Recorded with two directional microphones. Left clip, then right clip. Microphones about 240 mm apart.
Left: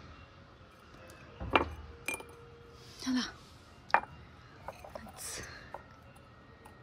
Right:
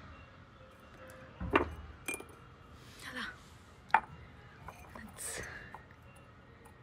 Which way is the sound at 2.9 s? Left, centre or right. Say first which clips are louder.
Left 6 dB; left.